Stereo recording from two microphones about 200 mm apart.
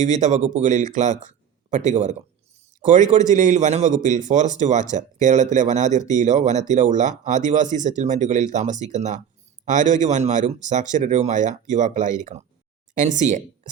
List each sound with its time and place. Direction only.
0.0 s a man's voice: 35° right (ahead or behind)